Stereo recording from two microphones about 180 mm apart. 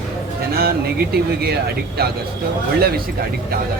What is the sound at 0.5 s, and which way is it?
Speech, 60° right (ahead or behind).